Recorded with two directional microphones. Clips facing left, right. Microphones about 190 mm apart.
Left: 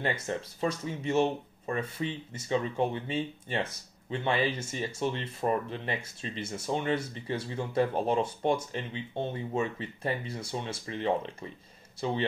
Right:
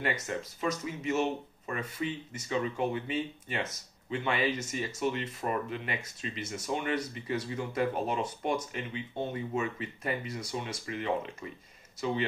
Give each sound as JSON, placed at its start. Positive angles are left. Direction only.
{"t": 0.0, "sound": "speech", "side_deg": 30}